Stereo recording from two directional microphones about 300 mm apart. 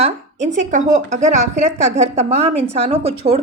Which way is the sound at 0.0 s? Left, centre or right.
Right.